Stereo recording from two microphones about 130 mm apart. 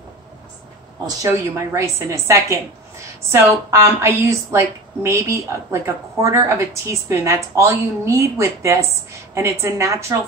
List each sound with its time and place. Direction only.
1.0 s a woman's voice: 25° right (ahead or behind)